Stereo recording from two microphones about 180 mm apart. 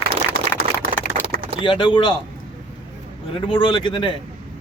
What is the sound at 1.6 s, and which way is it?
Speech, 25° left (ahead or behind).